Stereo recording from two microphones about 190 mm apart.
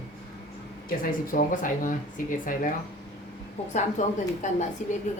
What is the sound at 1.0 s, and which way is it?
Speech, 45° left (ahead or behind).